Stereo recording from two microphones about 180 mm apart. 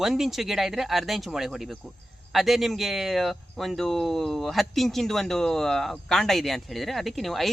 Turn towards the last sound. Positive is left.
turn(degrees=0)  # may be behind; listen again after turning